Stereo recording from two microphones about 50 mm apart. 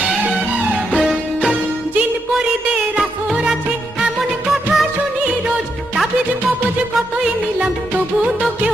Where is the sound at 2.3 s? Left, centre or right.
Centre.